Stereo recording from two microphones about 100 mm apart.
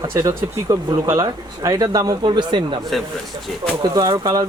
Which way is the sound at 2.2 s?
55° right (ahead or behind).